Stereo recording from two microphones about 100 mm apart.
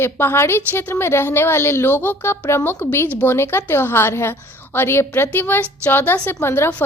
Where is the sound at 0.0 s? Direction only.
25° left (ahead or behind).